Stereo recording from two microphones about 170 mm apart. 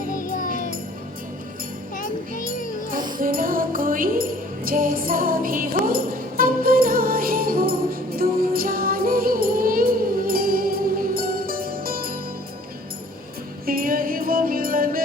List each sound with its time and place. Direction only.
0.1 s music: 50° left (ahead or behind)
3.2 s music: 55° right (ahead or behind)
13.7 s music: 60° right (ahead or behind)